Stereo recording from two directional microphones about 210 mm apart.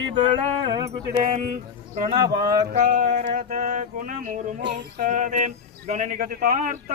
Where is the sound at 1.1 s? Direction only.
35° right (ahead or behind).